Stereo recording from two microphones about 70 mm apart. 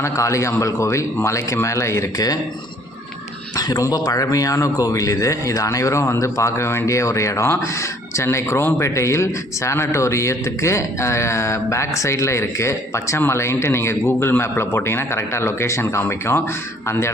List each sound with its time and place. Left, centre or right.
0.0 s a man's voice: left
3.6 s a man's voice: left